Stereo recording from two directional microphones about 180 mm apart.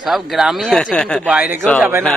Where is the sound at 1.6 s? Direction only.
5° left (ahead or behind).